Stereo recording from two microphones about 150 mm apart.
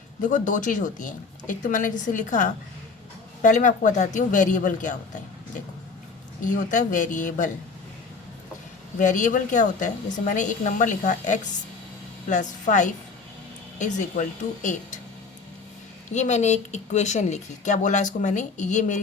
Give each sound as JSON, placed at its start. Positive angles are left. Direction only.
{"t": 0.2, "sound": "a woman's voice", "side_deg": 55}
{"t": 6.4, "sound": "a woman's voice", "side_deg": 60}
{"t": 9.0, "sound": "a woman's voice", "side_deg": 55}
{"t": 16.1, "sound": "speech", "side_deg": 50}